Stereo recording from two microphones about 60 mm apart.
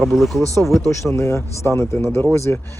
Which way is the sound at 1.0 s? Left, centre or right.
Left.